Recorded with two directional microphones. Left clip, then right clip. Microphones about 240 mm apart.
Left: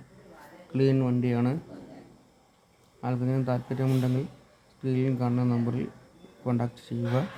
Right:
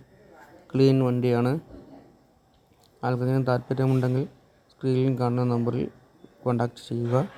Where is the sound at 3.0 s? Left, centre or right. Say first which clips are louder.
Right 4 dB; right.